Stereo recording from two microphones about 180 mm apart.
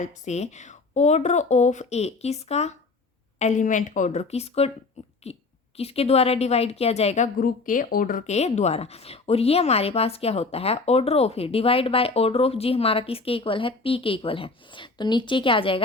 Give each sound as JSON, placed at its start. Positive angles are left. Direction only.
{"t": 0.0, "sound": "a woman's voice", "side_deg": 40}
{"t": 7.3, "sound": "speech", "side_deg": 50}